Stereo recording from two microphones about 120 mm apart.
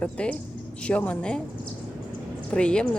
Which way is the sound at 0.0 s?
10° left (ahead or behind).